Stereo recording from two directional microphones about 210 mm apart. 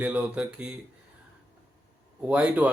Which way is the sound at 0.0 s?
5° right (ahead or behind).